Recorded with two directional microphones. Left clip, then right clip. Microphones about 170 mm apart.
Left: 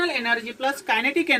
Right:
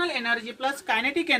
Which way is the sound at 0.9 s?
10° right (ahead or behind).